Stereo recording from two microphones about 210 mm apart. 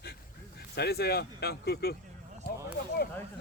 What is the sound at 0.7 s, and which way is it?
Speech, 50° left (ahead or behind).